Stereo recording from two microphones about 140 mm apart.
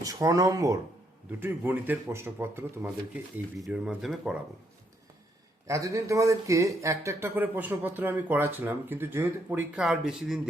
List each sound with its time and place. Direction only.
0.0 s speech: 25° right (ahead or behind)
3.6 s speech: 5° right (ahead or behind)
5.6 s speech: 20° right (ahead or behind); by 10.5 s 5° right (ahead or behind)